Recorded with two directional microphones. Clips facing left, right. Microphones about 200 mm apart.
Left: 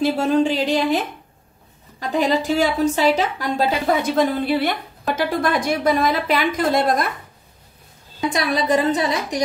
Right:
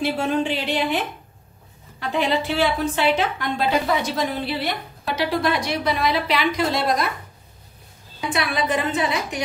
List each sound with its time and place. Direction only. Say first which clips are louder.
0.0 s a woman's voice: left 5 dB; 40° left (ahead or behind)
8.3 s a woman's voice: left 4 dB; 35° left (ahead or behind)